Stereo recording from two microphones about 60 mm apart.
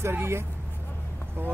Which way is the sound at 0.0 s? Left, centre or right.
Right.